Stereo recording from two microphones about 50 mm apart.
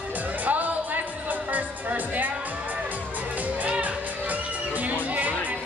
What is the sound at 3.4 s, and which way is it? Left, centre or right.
Music, right.